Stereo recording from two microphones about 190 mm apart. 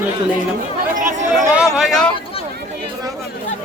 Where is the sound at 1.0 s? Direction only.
40° right (ahead or behind).